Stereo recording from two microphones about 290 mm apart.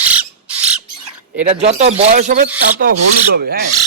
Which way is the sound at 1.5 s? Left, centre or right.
Right.